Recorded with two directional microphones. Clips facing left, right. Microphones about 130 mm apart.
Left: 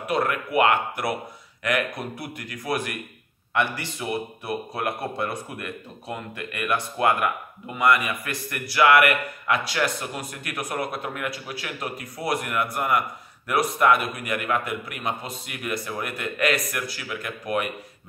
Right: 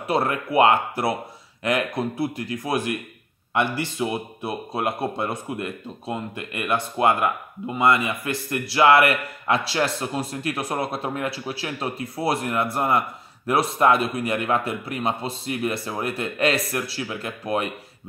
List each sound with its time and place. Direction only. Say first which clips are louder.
0.0 s a man's voice: right 2 dB; 30° right (ahead or behind)